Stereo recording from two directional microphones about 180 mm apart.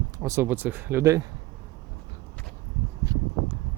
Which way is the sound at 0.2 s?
15° right (ahead or behind).